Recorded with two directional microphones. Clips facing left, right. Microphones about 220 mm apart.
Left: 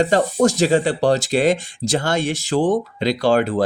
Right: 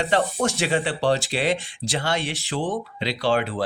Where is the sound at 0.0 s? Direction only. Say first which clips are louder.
Left 6 dB; 45° left (ahead or behind).